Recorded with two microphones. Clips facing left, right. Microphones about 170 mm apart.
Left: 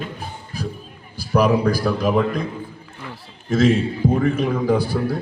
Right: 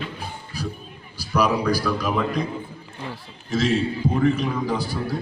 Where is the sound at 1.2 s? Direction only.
50° left (ahead or behind).